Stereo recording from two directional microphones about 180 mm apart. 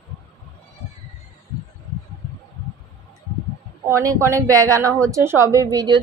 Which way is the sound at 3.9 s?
20° right (ahead or behind).